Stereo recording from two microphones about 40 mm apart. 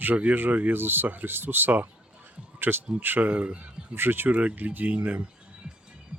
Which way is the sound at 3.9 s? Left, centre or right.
Right.